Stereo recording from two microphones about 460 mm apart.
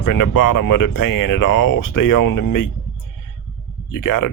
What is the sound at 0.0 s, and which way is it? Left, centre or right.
Speech, left.